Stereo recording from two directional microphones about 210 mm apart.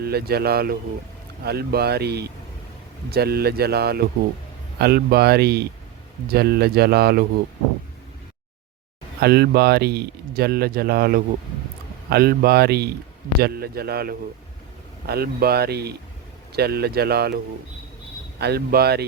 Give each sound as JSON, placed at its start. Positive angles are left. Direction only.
{"t": 0.0, "sound": "speech", "side_deg": -50}
{"t": 9.2, "sound": "speech", "side_deg": -50}